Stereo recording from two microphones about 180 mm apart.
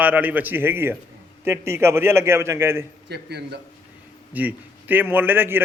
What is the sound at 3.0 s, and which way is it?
Speech, 65° right (ahead or behind).